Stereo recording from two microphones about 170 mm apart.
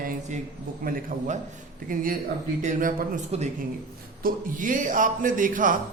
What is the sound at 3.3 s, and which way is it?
Speech, 40° right (ahead or behind).